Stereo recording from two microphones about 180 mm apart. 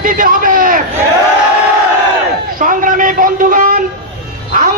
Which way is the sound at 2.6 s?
50° right (ahead or behind).